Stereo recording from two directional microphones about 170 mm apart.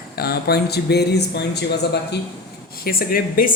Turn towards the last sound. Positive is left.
turn(degrees=60)  # may be behind; listen again after turning